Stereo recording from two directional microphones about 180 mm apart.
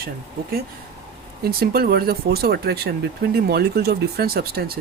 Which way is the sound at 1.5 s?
55° right (ahead or behind).